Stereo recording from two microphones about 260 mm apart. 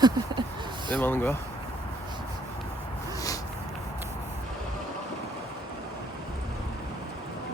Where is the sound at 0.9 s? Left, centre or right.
Centre.